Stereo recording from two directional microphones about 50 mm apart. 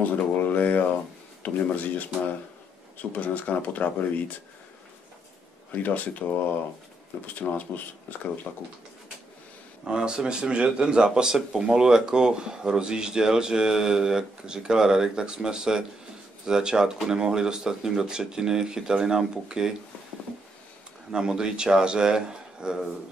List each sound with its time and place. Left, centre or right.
0.0 s speech: left
5.7 s speech: left
9.8 s speech: centre
21.1 s speech: centre